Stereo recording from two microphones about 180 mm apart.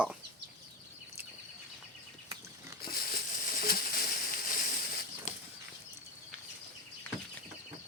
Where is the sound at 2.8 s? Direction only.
55° left (ahead or behind).